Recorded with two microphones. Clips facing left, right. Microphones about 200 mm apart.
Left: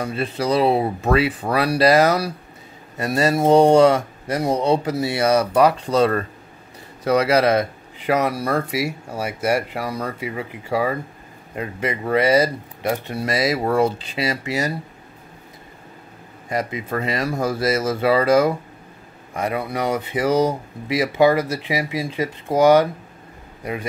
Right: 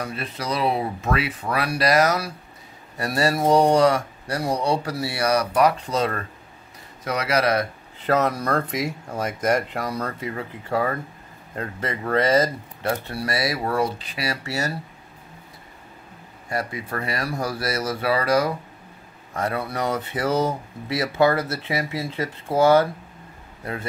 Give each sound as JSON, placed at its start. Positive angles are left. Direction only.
{"t": 0.0, "sound": "speech", "side_deg": 30}
{"t": 8.0, "sound": "speech", "side_deg": 10}
{"t": 16.4, "sound": "speech", "side_deg": 20}